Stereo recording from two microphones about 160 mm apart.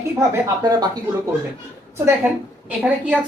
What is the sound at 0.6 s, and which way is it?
Speech, 25° right (ahead or behind).